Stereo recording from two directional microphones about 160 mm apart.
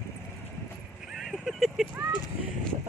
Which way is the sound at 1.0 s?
Centre (ahead or behind).